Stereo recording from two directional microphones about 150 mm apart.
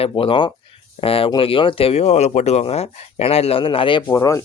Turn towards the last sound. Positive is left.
turn(degrees=20)  # may be behind; listen again after turning